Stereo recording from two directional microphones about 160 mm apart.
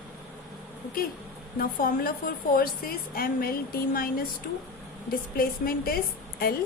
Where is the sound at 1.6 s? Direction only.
65° left (ahead or behind).